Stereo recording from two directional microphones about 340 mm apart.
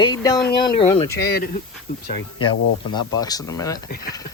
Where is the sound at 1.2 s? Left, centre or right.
Left.